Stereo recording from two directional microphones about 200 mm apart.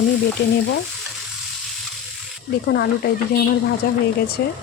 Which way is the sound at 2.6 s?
55° left (ahead or behind).